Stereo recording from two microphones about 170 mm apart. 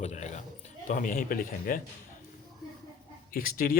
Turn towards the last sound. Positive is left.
turn(degrees=60)  # may be behind; listen again after turning